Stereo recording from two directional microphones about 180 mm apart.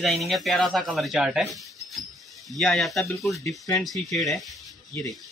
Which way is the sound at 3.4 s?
15° left (ahead or behind).